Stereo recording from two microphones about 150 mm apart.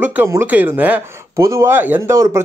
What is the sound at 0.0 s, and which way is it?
Speech, 10° right (ahead or behind).